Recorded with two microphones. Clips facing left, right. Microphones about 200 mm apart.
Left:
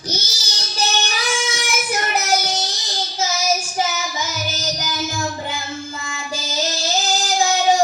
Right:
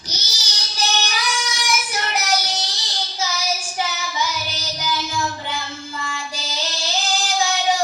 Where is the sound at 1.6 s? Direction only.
45° left (ahead or behind).